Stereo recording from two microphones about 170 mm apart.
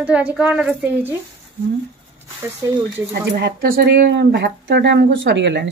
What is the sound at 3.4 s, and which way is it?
Speech, 60° right (ahead or behind).